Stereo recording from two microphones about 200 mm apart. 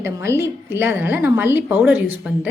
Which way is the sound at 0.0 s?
10° right (ahead or behind).